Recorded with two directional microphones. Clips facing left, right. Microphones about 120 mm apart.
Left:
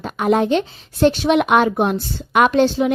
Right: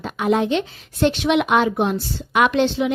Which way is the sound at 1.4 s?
50° left (ahead or behind).